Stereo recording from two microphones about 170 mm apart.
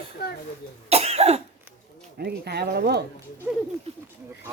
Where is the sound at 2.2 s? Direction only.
70° right (ahead or behind).